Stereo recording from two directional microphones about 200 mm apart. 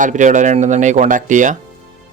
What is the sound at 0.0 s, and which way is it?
A man's voice, 40° right (ahead or behind).